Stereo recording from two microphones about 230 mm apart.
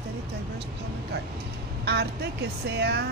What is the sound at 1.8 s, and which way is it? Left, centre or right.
Speech, right.